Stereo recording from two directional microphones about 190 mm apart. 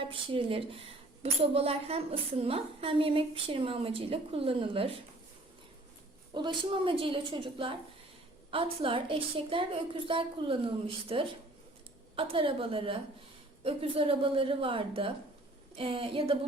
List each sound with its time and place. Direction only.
0.0 s a woman's voice: 25° right (ahead or behind)
6.3 s a woman's voice: 25° right (ahead or behind)